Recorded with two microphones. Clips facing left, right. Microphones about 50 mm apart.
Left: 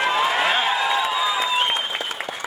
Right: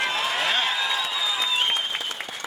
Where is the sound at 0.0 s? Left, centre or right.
Centre.